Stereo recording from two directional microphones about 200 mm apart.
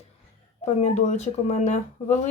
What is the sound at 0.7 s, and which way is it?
Speech, 35° left (ahead or behind).